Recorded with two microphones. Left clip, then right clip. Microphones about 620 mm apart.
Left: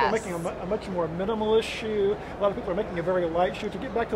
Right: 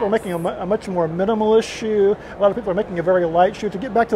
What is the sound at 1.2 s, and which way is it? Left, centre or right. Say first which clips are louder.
Speech: right 8 dB; right.